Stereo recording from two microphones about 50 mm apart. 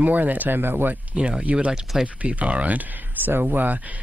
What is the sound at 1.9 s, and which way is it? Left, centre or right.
Speech, centre.